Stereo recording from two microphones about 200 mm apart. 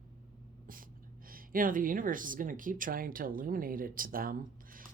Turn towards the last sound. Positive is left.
turn(degrees=-45)  # may be behind; listen again after turning